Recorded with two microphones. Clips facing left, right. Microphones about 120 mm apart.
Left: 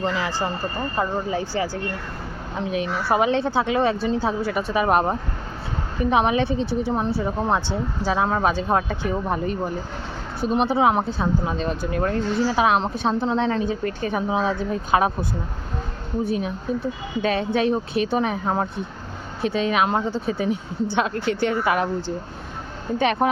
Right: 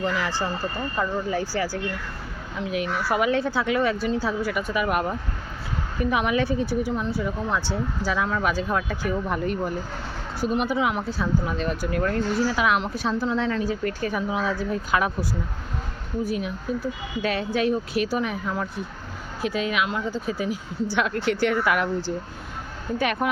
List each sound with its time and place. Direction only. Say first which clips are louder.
0.0 s speech: left 1 dB; 25° left (ahead or behind)
0.4 s speech: left 2 dB; 35° left (ahead or behind)
1.3 s speech: left 1 dB; 20° left (ahead or behind)
20.9 s speech: left 1 dB; 20° left (ahead or behind)
23.0 s speech: left 4 dB; 30° left (ahead or behind)